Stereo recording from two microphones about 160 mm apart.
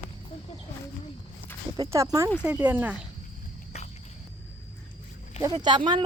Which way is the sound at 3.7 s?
45° left (ahead or behind).